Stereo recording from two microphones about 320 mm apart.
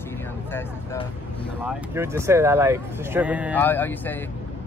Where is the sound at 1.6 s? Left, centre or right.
Centre.